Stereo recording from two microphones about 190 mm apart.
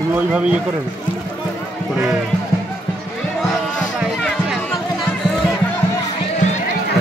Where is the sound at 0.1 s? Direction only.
5° right (ahead or behind).